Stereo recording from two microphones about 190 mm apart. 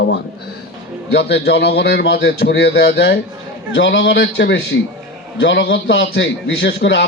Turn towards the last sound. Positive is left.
turn(degrees=70)  # may be behind; listen again after turning